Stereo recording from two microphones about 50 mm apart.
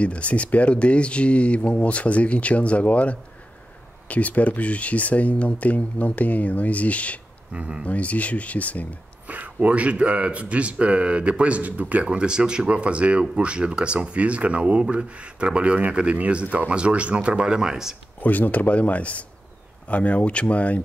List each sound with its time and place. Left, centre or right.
0.0 s speech: left
7.5 s speech: right
7.8 s speech: left
9.3 s speech: right; by 17.9 s centre
18.2 s speech: left